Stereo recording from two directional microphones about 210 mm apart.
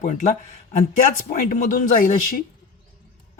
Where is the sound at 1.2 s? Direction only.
40° left (ahead or behind).